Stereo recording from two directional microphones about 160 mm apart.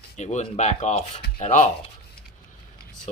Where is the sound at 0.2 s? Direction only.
45° left (ahead or behind).